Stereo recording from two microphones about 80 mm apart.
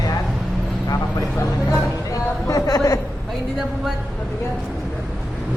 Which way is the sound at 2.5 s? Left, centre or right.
Left.